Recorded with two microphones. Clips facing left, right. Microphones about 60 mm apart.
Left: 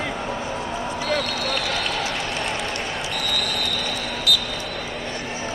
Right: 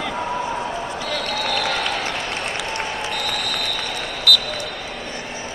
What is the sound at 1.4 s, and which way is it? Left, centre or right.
Run, right.